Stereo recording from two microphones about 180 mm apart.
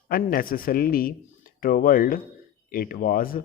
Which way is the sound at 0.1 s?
55° left (ahead or behind).